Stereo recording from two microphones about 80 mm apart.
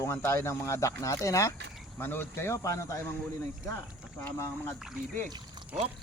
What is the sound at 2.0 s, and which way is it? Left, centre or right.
Speech, left.